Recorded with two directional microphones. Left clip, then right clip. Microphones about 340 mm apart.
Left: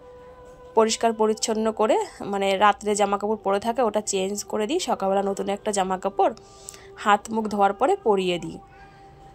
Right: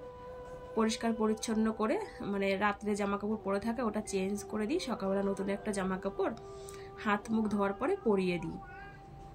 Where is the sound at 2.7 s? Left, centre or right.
Left.